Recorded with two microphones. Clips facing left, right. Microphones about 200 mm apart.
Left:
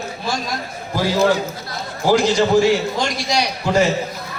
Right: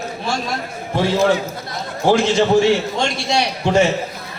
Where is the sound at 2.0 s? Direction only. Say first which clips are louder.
Right 1 dB; 25° right (ahead or behind).